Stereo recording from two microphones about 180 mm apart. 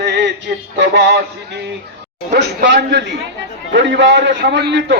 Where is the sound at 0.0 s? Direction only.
70° right (ahead or behind).